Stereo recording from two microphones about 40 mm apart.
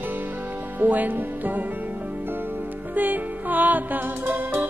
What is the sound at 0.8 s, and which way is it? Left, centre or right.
Music, right.